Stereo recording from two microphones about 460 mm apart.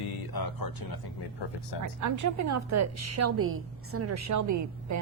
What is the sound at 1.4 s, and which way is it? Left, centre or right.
Speech, left.